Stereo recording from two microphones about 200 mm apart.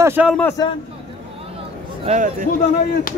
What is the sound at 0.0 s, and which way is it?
Speech, 10° right (ahead or behind).